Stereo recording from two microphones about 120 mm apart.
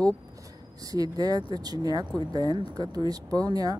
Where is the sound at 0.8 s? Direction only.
30° right (ahead or behind).